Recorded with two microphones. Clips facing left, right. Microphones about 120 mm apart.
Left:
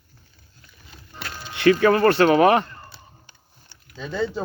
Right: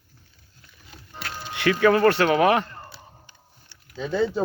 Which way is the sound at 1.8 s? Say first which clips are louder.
Right 2 dB; 5° right (ahead or behind).